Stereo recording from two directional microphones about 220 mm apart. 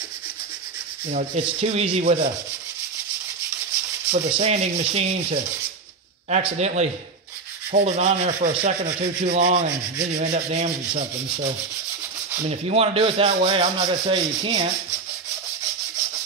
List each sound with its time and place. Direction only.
1.1 s rub: 30° right (ahead or behind)
4.4 s rub: 30° right (ahead or behind)